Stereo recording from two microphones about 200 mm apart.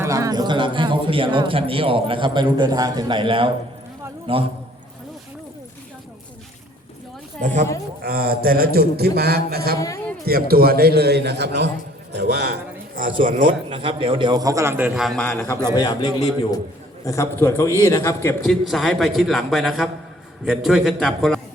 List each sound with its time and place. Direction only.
0.0 s a man's voice: 15° right (ahead or behind)
7.4 s a man's voice: 40° right (ahead or behind)
9.7 s a sound: 15° left (ahead or behind)
10.2 s a man's voice: 50° right (ahead or behind)
13.2 s speech: 40° right (ahead or behind)
13.7 s a man's voice: 25° right (ahead or behind); by 15.4 s 5° left (ahead or behind)
15.4 s a man's voice: 20° left (ahead or behind)
17.0 s a man's voice: 15° left (ahead or behind)
18.4 s a man's voice: centre (ahead or behind)